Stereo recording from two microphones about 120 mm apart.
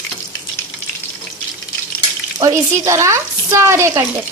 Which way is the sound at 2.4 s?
30° right (ahead or behind).